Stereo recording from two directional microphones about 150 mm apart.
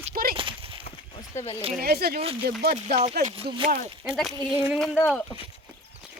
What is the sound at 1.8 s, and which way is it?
Speech, 90° right.